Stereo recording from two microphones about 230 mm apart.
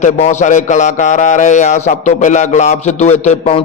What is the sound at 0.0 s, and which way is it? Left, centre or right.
A man's voice, left.